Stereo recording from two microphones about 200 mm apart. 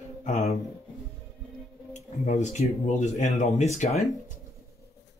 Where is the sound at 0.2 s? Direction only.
35° left (ahead or behind).